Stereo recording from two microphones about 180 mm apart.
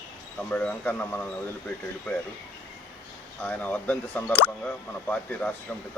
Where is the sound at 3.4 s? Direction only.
10° left (ahead or behind).